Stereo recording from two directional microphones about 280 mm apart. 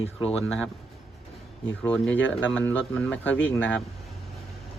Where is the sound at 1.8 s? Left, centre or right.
Centre.